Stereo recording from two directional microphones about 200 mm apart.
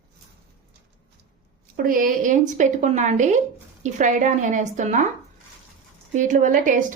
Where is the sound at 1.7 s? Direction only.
45° right (ahead or behind).